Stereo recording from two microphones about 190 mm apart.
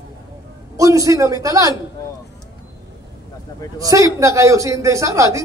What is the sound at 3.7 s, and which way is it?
A man's voice, 15° right (ahead or behind).